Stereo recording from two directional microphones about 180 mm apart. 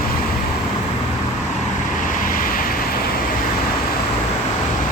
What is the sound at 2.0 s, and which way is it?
Vehicle, 50° left (ahead or behind).